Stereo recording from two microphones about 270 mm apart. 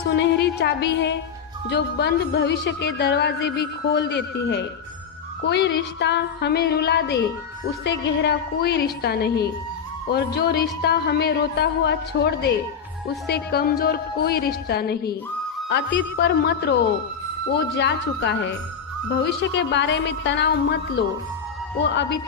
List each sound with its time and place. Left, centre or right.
0.1 s speech: left
17.7 s speech: left